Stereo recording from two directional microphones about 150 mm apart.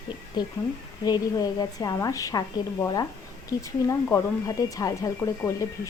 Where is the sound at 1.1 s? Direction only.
25° left (ahead or behind).